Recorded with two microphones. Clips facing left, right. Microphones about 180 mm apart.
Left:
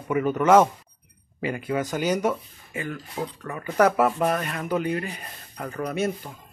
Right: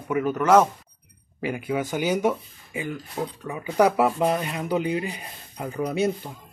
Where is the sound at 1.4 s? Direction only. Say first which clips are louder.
Even; 5° right (ahead or behind).